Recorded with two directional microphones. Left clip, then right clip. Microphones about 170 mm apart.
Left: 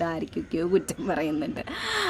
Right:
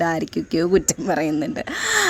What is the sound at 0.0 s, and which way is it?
Speech, 40° right (ahead or behind).